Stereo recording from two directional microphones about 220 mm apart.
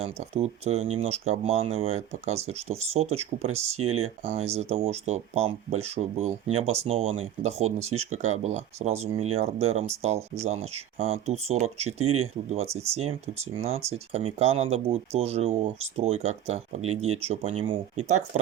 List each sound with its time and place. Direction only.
0.0 s speech: 30° right (ahead or behind)
3.8 s speech: 75° right (ahead or behind)
4.2 s speech: 30° right (ahead or behind)
12.0 s speech: 80° right
12.5 s speech: 30° right (ahead or behind)